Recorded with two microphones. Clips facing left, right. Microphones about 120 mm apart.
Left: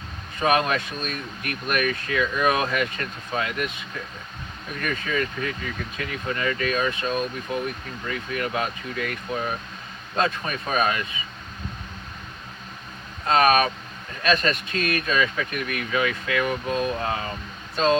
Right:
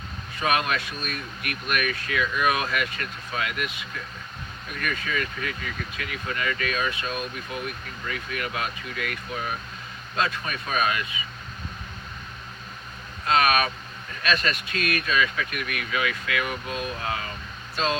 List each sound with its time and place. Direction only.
0.3 s speech: 30° left (ahead or behind)
4.8 s speech: 30° left (ahead or behind)
10.2 s speech: 30° left (ahead or behind)
13.2 s speech: 35° left (ahead or behind)